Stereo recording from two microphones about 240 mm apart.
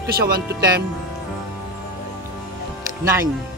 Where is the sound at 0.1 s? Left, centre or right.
Right.